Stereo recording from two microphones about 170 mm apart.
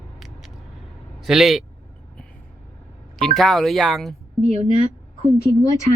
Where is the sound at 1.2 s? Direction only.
Centre (ahead or behind).